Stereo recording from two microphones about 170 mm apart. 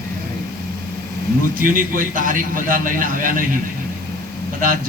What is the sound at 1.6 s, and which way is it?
A man's voice, 55° right (ahead or behind).